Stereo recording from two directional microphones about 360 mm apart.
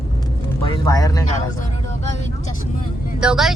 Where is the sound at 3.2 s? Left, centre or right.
Centre.